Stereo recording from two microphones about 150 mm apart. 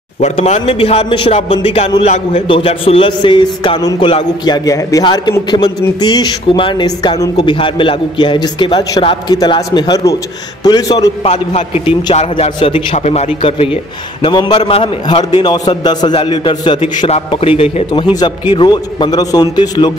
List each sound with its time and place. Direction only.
0.2 s a man's voice: 45° left (ahead or behind); by 11.1 s 25° left (ahead or behind)
11.2 s a man's voice: 45° left (ahead or behind)
13.4 s a man's voice: 35° left (ahead or behind)
17.1 s a man's voice: 40° left (ahead or behind)